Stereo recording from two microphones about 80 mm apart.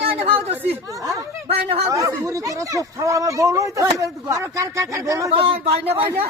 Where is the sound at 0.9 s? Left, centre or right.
Right.